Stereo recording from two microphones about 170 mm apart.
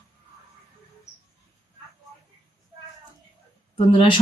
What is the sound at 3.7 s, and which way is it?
Speech, 30° left (ahead or behind).